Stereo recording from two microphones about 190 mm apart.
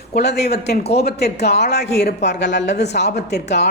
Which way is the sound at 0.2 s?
60° left (ahead or behind).